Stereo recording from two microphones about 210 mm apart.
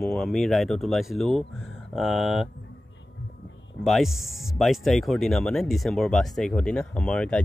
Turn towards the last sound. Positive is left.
turn(degrees=5)  # may be behind; listen again after turning